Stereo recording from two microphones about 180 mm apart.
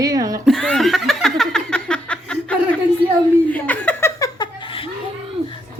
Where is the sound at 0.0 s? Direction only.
20° right (ahead or behind).